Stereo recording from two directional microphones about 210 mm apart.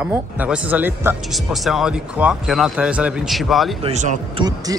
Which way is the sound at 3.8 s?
35° right (ahead or behind).